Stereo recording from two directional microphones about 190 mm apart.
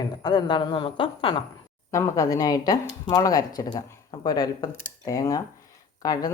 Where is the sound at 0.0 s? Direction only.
20° left (ahead or behind).